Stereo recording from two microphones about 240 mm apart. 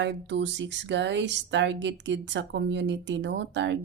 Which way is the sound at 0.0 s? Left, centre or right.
Right.